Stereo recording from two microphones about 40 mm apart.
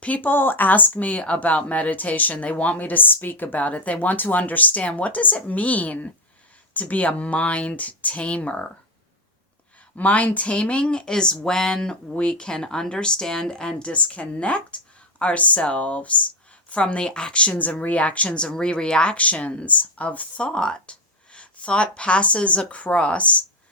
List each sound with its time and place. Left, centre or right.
0.0 s speech: left
9.9 s speech: left
13.9 s speech: left
17.6 s speech: left
18.4 s speech: centre
19.1 s speech: left
20.4 s speech: left